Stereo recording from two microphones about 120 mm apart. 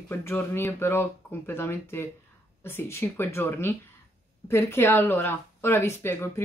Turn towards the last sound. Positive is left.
turn(degrees=20)  # may be behind; listen again after turning